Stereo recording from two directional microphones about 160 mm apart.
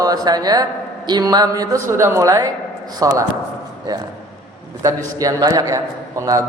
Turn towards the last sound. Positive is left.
turn(degrees=-20)  # may be behind; listen again after turning